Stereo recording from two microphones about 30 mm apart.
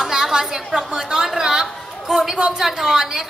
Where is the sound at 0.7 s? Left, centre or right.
Centre.